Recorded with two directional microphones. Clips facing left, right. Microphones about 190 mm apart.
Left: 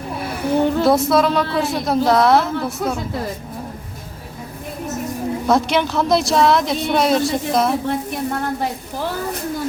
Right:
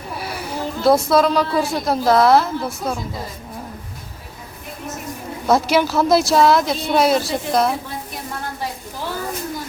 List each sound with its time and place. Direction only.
0.5 s a sound: 65° left (ahead or behind)
0.9 s a woman's voice: centre (ahead or behind)
5.5 s a woman's voice: 5° right (ahead or behind)